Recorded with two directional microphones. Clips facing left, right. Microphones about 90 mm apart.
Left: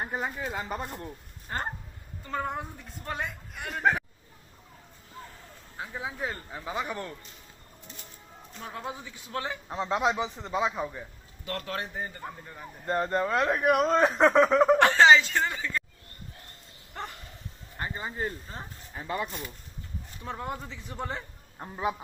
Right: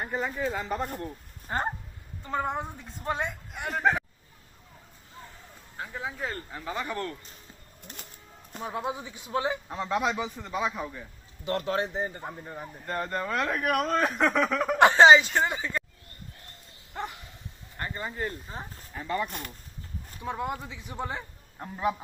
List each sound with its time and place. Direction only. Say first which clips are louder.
0.0 s speech: right 2 dB; 15° left (ahead or behind)
0.6 s speech: right 3 dB; 5° left (ahead or behind)
1.5 s a woman's voice: right 4 dB; 15° right (ahead or behind)
5.7 s speech: even; 15° left (ahead or behind)
7.8 s a sound: right 3 dB; 65° right (ahead or behind)
8.6 s speech: right 5 dB; 15° right (ahead or behind)
9.6 s speech: left 1 dB; 20° left (ahead or behind)
11.4 s a woman's voice: right 6 dB; 25° right (ahead or behind)
12.8 s speech: left 5 dB; 25° left (ahead or behind)
14.8 s speech: right 7 dB; 20° right (ahead or behind)
16.9 s bow-wow: right 3 dB; 15° right (ahead or behind)
17.7 s speech: even; 15° left (ahead or behind)
20.2 s speech: right 3 dB; 10° right (ahead or behind)
21.6 s speech: right 2 dB; 20° left (ahead or behind)